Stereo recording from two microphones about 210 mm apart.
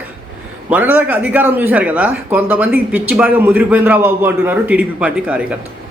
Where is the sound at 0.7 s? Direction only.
5° right (ahead or behind).